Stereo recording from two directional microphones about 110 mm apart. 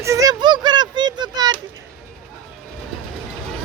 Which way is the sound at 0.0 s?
30° right (ahead or behind).